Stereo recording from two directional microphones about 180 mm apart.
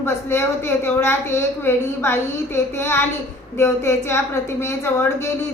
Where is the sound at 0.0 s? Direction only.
15° left (ahead or behind).